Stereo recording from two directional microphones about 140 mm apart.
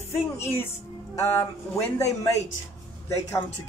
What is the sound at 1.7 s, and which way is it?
Speech, 20° left (ahead or behind).